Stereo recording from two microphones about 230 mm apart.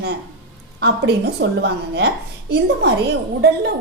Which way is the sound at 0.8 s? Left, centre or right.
Right.